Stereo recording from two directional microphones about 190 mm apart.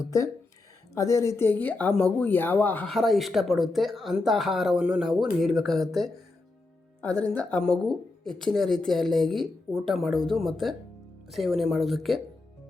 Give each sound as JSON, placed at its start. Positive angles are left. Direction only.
{"t": 0.0, "sound": "speech", "side_deg": 15}
{"t": 7.3, "sound": "speech", "side_deg": 5}